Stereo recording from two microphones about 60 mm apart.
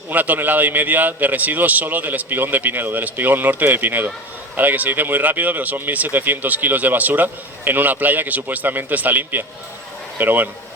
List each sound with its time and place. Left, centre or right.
0.1 s speech: right